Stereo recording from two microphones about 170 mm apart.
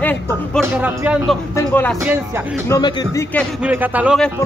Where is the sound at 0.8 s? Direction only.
10° right (ahead or behind).